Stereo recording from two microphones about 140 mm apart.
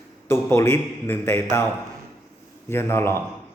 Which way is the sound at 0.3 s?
20° left (ahead or behind).